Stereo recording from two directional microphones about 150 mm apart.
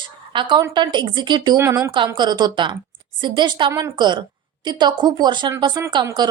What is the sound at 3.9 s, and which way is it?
A woman's voice, 30° right (ahead or behind).